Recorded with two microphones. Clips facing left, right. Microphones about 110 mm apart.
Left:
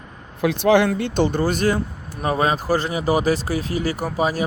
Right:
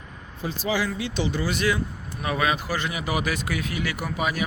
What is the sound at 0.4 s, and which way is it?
Speech, 70° left (ahead or behind).